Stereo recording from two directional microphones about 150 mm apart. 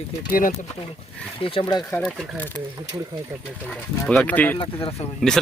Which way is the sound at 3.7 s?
5° left (ahead or behind).